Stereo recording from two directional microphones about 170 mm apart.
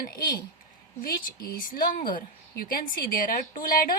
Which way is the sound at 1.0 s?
60° left (ahead or behind).